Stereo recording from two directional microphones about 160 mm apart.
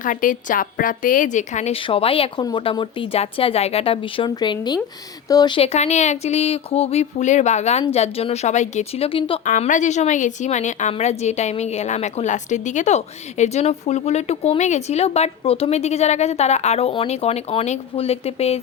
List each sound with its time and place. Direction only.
0.0 s a woman's voice: 55° left (ahead or behind); by 9.4 s 35° left (ahead or behind)
9.5 s a woman's voice: 50° left (ahead or behind)